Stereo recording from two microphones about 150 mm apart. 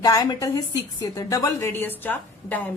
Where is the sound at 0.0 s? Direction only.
25° left (ahead or behind).